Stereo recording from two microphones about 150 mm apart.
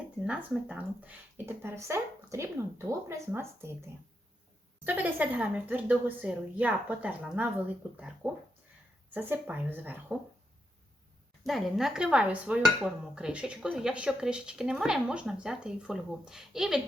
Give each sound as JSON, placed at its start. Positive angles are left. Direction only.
{"t": 0.2, "sound": "speech", "side_deg": -10}
{"t": 11.4, "sound": "dishes", "side_deg": 0}